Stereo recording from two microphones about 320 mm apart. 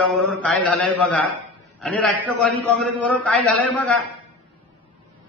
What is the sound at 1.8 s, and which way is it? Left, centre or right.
A man's voice, centre.